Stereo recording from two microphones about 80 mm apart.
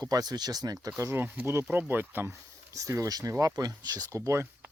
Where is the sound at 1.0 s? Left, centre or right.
Right.